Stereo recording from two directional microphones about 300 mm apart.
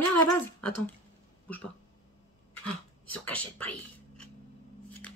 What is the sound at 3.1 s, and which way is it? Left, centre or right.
Speech, centre.